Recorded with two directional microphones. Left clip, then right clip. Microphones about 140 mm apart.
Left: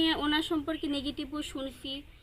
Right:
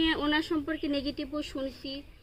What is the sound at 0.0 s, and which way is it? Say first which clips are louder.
A woman's voice: right 1 dB; 30° left (ahead or behind).